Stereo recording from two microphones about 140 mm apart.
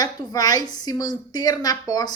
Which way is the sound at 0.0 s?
30° left (ahead or behind).